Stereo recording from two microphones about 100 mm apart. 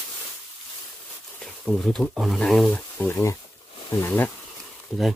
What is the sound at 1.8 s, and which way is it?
Speech, centre (ahead or behind).